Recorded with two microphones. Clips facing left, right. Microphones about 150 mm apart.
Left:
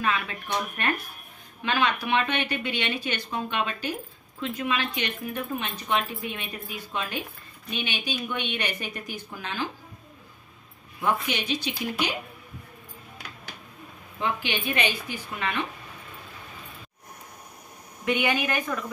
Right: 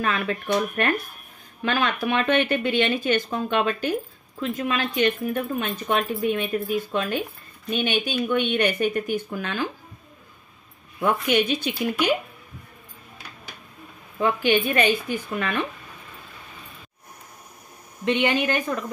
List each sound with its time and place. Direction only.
0.0 s speech: 50° right (ahead or behind)
11.0 s speech: 55° right (ahead or behind)
14.2 s speech: 45° right (ahead or behind)
18.0 s a woman's voice: 30° right (ahead or behind)